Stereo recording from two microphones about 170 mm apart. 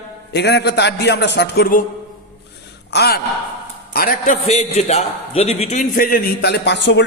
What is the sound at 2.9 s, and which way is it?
A man's voice, 70° left (ahead or behind).